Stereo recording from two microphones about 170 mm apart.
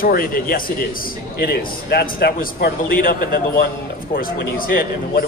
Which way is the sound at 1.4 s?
70° left (ahead or behind).